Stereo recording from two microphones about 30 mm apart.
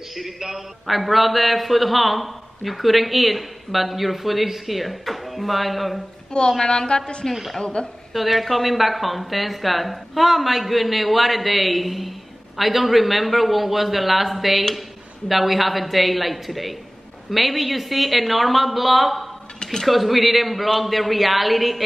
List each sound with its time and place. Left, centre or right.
0.4 s a man's voice: centre
6.6 s a woman's voice: left
7.6 s a woman's voice: left
8.1 s a man's voice: centre
19.6 s speech: left
19.9 s a man's voice: centre